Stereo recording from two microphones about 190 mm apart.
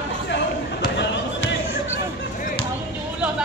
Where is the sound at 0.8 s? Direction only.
65° left (ahead or behind).